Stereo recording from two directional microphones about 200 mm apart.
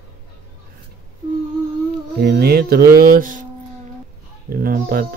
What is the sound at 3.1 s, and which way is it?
Speech, 40° right (ahead or behind).